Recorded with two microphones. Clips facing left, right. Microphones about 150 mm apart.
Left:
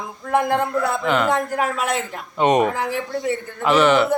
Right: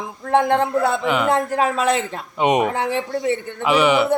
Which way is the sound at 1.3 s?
25° right (ahead or behind).